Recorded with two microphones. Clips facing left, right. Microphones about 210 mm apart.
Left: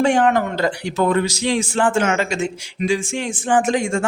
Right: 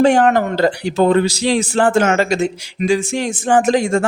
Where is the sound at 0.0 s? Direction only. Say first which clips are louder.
Right 4 dB; 40° right (ahead or behind).